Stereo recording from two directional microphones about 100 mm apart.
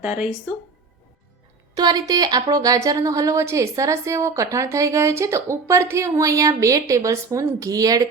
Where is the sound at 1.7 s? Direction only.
40° right (ahead or behind).